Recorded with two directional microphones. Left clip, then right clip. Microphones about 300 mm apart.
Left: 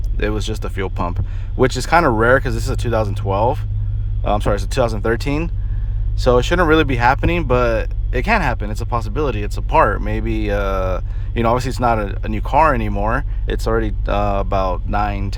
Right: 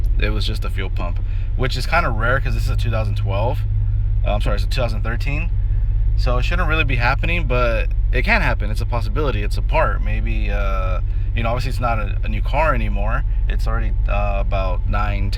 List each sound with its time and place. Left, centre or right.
0.2 s speech: centre